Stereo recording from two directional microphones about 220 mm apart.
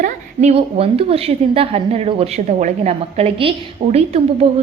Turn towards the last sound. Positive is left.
turn(degrees=-30)  # may be behind; listen again after turning